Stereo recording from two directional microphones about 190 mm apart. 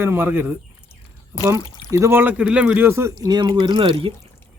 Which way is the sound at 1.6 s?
20° left (ahead or behind).